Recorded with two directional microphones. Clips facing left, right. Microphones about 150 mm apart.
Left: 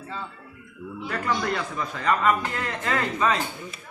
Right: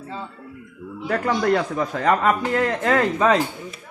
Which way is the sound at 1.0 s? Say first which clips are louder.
Right 6 dB; 45° right (ahead or behind).